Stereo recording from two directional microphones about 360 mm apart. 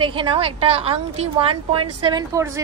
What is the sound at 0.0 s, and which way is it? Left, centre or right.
A woman's voice, centre.